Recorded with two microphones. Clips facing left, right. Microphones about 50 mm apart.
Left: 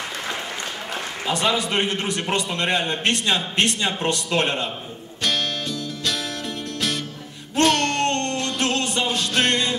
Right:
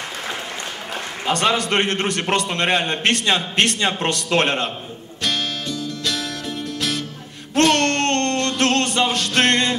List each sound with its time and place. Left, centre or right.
1.3 s a man's voice: right
5.2 s music: centre
7.6 s music: centre
8.0 s music: right